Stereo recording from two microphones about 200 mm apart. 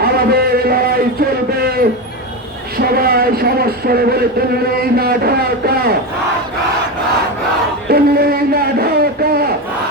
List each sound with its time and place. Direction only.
0.0 s music: 50° right (ahead or behind)
2.7 s a man's voice: 50° right (ahead or behind)
7.9 s a sound: 50° right (ahead or behind)